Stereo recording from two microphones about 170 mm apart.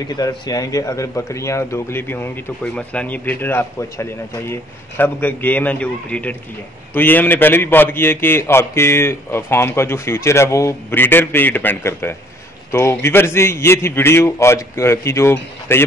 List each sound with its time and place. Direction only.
0.1 s a man's voice: 20° left (ahead or behind)